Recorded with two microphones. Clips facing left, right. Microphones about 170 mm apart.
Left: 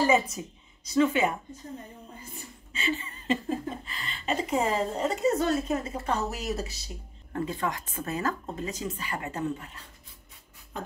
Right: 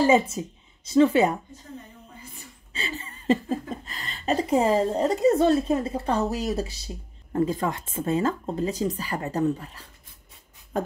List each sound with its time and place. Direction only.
0.0 s a woman's voice: 25° right (ahead or behind)
2.7 s speech: 35° right (ahead or behind)